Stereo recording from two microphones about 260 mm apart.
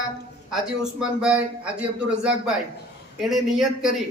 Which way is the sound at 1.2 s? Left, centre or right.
Centre.